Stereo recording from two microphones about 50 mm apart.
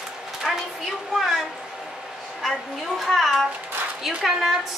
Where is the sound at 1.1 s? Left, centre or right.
Centre.